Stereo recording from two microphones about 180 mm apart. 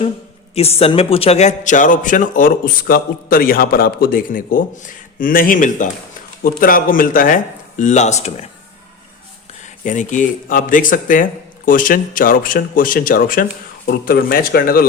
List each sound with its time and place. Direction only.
0.5 s a man's voice: 35° left (ahead or behind)
9.6 s a man's voice: 45° left (ahead or behind)